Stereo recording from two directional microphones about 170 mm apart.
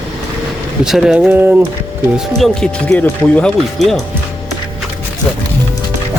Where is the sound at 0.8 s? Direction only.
5° right (ahead or behind).